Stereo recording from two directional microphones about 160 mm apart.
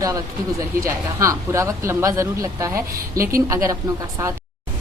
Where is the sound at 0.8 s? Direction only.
20° right (ahead or behind).